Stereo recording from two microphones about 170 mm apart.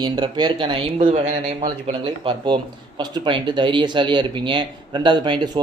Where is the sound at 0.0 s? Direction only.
25° right (ahead or behind).